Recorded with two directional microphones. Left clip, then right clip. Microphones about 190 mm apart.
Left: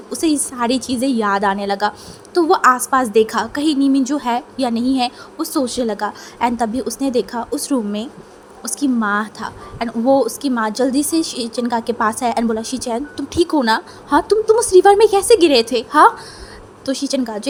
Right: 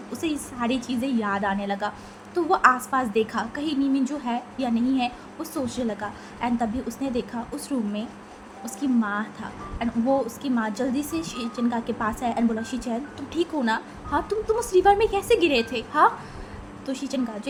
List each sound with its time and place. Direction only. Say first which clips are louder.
0.1 s a woman's voice: left 11 dB; 50° left (ahead or behind)